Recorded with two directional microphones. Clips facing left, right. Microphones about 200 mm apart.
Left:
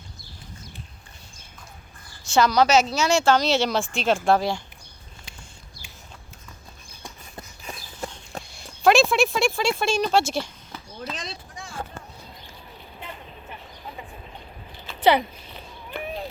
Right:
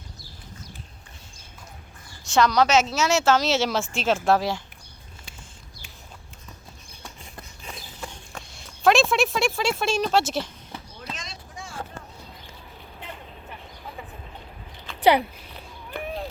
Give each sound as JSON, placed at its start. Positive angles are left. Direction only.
{"t": 2.2, "sound": "a woman's voice", "side_deg": 0}
{"t": 8.0, "sound": "horse", "side_deg": 35}
{"t": 8.5, "sound": "speech", "side_deg": 0}
{"t": 11.1, "sound": "a sound", "side_deg": 35}
{"t": 15.0, "sound": "cat", "side_deg": -10}